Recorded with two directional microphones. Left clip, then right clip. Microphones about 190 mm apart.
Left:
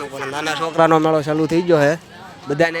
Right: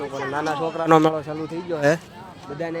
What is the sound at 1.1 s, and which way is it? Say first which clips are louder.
A man's voice: left 11 dB; 30° left (ahead or behind).